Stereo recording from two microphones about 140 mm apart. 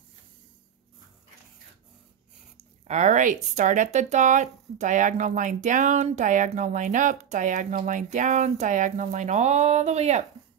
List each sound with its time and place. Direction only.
2.9 s speech: 60° right (ahead or behind)